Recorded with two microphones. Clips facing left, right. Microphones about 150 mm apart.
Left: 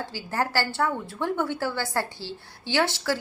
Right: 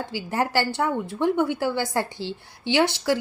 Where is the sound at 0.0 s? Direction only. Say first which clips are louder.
Right 3 dB; 15° right (ahead or behind).